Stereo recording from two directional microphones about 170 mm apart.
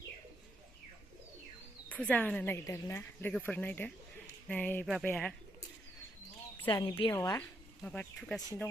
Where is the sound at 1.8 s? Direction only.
5° left (ahead or behind).